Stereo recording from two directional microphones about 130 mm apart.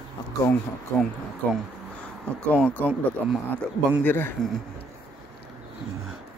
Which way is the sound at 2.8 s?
5° right (ahead or behind).